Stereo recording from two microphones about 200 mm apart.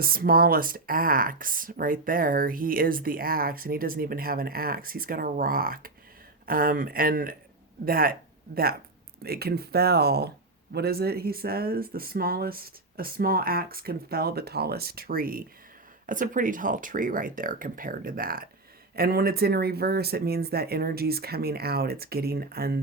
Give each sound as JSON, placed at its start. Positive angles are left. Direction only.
{"t": 0.0, "sound": "speech", "side_deg": -45}
{"t": 9.2, "sound": "speech", "side_deg": -50}